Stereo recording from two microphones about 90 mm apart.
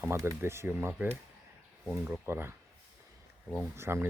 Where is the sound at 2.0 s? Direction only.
25° right (ahead or behind).